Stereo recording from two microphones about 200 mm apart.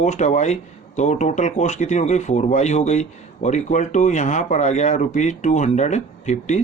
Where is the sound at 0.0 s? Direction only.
35° left (ahead or behind).